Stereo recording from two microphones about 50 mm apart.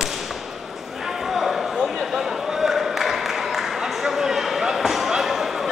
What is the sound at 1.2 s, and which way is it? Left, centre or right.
Basketball bounce, centre.